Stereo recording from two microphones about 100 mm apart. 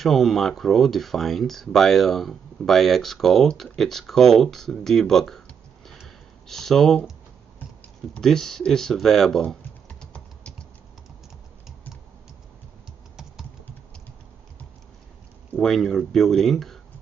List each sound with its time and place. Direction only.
0.0 s speech: centre (ahead or behind)
5.9 s a sound: centre (ahead or behind)
8.1 s speech: 5° left (ahead or behind)
13.1 s typing: 5° right (ahead or behind)
15.5 s speech: 5° left (ahead or behind)